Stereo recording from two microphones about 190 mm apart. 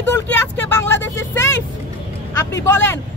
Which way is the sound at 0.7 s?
15° left (ahead or behind).